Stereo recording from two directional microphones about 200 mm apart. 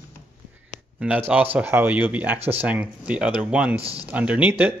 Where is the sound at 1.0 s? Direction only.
5° right (ahead or behind).